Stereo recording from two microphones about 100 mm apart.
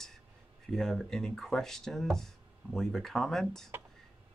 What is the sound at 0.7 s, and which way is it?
Speech, 5° left (ahead or behind).